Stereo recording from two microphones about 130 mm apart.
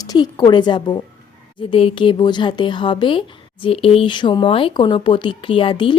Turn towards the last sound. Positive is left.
turn(degrees=40)  # may be behind; listen again after turning